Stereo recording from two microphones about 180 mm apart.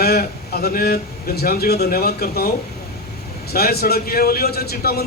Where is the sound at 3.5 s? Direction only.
60° left (ahead or behind).